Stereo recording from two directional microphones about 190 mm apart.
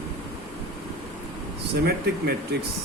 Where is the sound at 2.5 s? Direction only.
60° right (ahead or behind).